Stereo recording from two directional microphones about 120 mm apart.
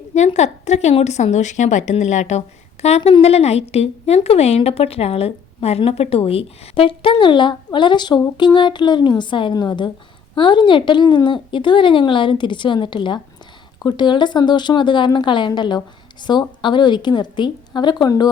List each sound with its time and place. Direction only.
0.3 s speech: 70° left (ahead or behind)
2.8 s a woman's voice: 55° left (ahead or behind); by 18.3 s 35° left (ahead or behind)